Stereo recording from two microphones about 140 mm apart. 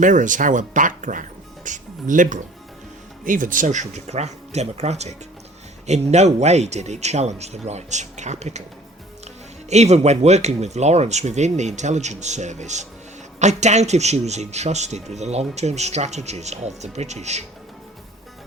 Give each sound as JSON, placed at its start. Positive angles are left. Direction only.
{"t": 0.0, "sound": "speech", "side_deg": -65}